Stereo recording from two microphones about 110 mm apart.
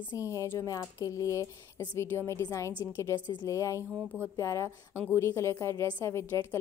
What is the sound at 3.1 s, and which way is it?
A woman's voice, 35° left (ahead or behind).